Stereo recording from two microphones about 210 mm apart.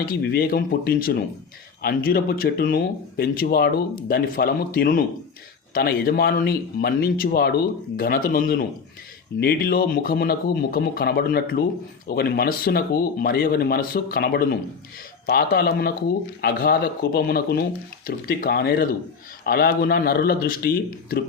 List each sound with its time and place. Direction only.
0.0 s speech: 45° left (ahead or behind)